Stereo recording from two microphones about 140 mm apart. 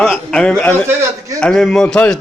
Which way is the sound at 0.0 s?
5° left (ahead or behind).